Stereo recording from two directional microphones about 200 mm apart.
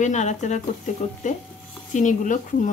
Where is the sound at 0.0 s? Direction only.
35° left (ahead or behind).